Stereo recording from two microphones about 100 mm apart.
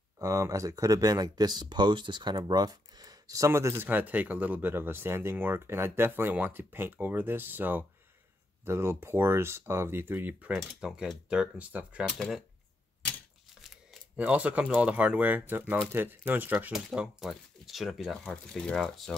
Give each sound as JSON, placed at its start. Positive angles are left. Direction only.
{"t": 0.2, "sound": "speech", "side_deg": -35}
{"t": 10.5, "sound": "speech", "side_deg": -5}
{"t": 12.1, "sound": "speech", "side_deg": 5}
{"t": 14.1, "sound": "speech", "side_deg": -15}
{"t": 16.7, "sound": "speech", "side_deg": -5}